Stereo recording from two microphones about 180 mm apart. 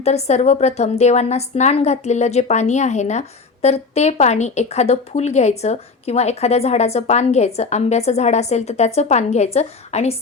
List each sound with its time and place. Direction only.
0.0 s a woman's voice: 35° left (ahead or behind)